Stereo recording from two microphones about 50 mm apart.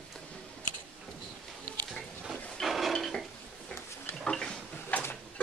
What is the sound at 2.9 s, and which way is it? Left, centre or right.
Dishes, centre.